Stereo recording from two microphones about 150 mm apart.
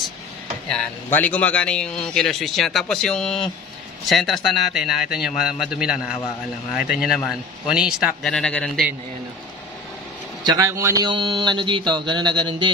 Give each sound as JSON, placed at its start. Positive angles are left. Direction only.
{"t": 0.7, "sound": "a man's voice", "side_deg": 10}
{"t": 10.4, "sound": "a man's voice", "side_deg": -20}
{"t": 11.1, "sound": "a sound", "side_deg": -30}